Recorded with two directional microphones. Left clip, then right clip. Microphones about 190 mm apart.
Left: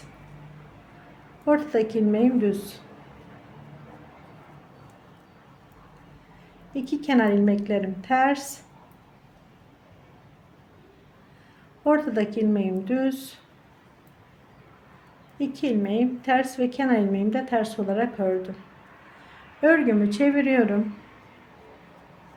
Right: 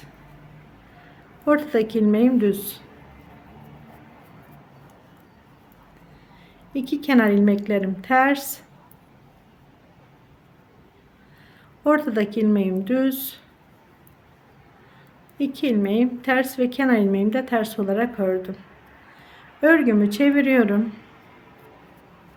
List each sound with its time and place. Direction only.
1.5 s a woman's voice: 25° right (ahead or behind)
6.7 s a woman's voice: 25° right (ahead or behind)
11.8 s a woman's voice: 25° right (ahead or behind)
15.4 s a woman's voice: 25° right (ahead or behind)
19.6 s a woman's voice: 25° right (ahead or behind)